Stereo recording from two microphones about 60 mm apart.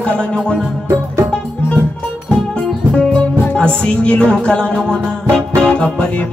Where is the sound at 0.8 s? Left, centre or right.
Right.